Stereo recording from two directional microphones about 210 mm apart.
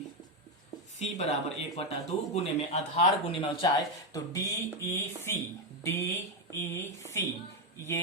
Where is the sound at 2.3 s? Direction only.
30° left (ahead or behind).